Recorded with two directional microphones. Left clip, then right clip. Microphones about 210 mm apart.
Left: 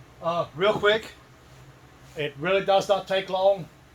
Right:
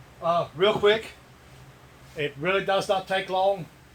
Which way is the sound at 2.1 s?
20° left (ahead or behind).